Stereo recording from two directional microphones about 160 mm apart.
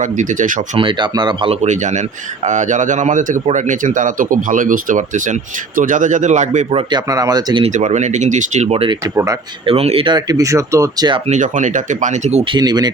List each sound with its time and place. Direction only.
0.0 s a man's voice: 50° right (ahead or behind)
0.8 s speech: 30° right (ahead or behind)
1.6 s a man's voice: 50° right (ahead or behind)
6.7 s speech: 25° right (ahead or behind)
7.6 s a man's voice: 50° right (ahead or behind)
9.1 s speech: 20° right (ahead or behind)
9.6 s speech: 40° right (ahead or behind)
11.3 s a man's voice: 50° right (ahead or behind)
12.5 s speech: 25° right (ahead or behind)